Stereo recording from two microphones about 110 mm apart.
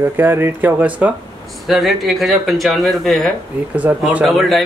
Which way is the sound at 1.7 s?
Centre (ahead or behind).